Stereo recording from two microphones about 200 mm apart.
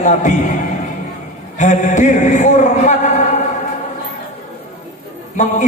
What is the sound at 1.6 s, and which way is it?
A man's voice, 40° left (ahead or behind).